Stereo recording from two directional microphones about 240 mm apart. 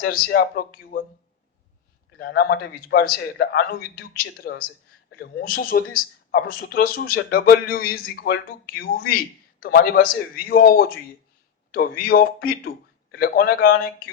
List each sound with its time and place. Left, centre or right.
0.0 s speech: left
2.1 s speech: left
12.0 s speech: left